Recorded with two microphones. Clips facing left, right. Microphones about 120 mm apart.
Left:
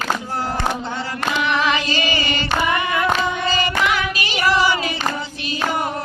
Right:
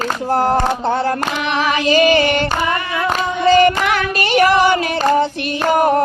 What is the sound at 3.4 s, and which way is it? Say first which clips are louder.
Child singing: right 13 dB; 60° right (ahead or behind).